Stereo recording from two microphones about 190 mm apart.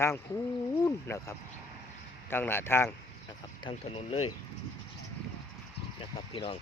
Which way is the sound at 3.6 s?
30° left (ahead or behind).